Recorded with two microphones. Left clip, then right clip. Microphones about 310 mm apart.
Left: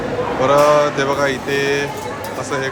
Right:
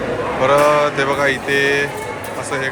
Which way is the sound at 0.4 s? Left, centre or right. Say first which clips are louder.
Left 1 dB; centre.